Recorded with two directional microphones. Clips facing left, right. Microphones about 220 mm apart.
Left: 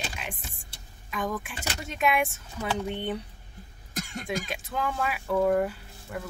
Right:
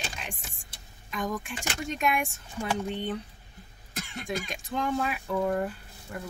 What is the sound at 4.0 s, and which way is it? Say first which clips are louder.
Cough: left 3 dB; 40° left (ahead or behind).